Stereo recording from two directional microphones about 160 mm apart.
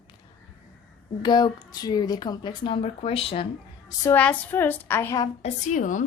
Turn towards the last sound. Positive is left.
turn(degrees=55)  # may be behind; listen again after turning